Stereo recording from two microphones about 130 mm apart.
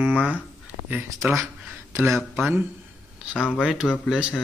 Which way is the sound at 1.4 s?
20° right (ahead or behind).